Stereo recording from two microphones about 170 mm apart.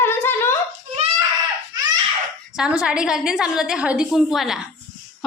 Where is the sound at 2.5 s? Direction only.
5° right (ahead or behind).